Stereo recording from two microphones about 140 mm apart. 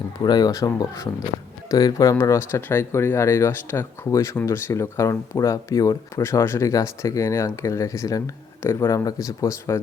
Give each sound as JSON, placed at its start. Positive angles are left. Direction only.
{"t": 0.2, "sound": "speech", "side_deg": 30}